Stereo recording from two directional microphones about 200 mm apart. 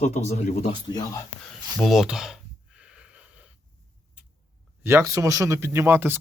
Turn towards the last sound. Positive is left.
turn(degrees=-10)  # may be behind; listen again after turning